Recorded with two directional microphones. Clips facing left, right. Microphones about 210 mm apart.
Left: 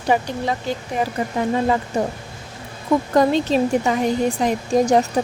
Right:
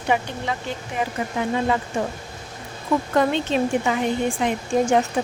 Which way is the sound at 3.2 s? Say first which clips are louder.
Left 4 dB; 35° left (ahead or behind).